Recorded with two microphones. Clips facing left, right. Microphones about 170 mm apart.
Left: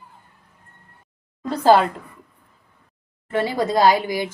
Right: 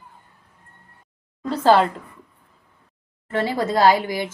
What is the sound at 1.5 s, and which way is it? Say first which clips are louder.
Speech: left 1 dB; 15° left (ahead or behind).